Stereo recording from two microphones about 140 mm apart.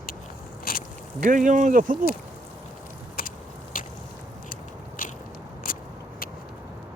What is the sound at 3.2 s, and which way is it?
Biting, 90° left.